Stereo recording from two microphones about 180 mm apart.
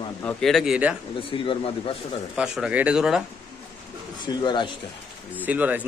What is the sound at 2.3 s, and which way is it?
Speech, 5° right (ahead or behind).